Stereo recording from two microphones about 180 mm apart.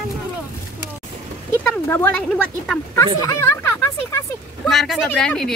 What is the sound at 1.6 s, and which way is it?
Speech, 10° left (ahead or behind).